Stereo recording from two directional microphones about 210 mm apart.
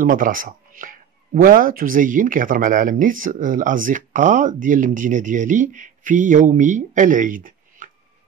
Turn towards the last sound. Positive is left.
turn(degrees=-40)  # may be behind; listen again after turning